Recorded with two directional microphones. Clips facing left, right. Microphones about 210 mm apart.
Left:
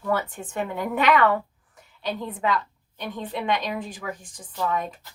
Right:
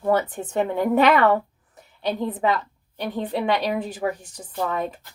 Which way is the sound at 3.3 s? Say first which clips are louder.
Right 4 dB; 40° right (ahead or behind).